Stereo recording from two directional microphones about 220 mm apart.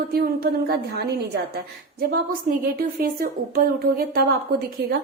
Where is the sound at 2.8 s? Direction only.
40° right (ahead or behind).